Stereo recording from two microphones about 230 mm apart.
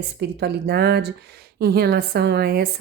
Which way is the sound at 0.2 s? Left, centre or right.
Right.